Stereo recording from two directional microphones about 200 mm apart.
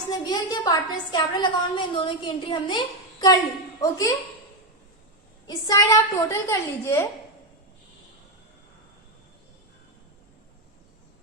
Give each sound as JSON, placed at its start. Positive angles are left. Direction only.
{"t": 0.1, "sound": "a woman's voice", "side_deg": 20}
{"t": 5.5, "sound": "a woman's voice", "side_deg": 15}